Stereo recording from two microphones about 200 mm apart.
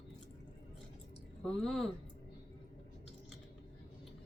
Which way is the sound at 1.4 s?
Centre (ahead or behind).